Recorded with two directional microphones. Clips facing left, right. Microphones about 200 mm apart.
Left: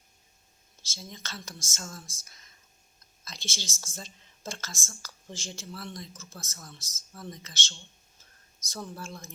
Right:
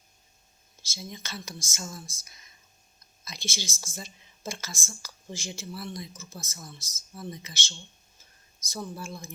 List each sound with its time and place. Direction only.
0.8 s speech: 10° right (ahead or behind)